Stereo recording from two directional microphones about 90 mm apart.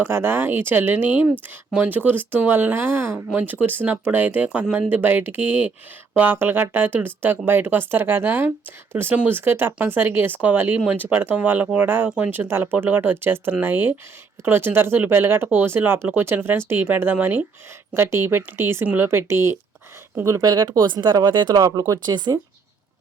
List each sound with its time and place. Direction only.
0.1 s speech: 25° right (ahead or behind)
20.2 s speech: 40° right (ahead or behind)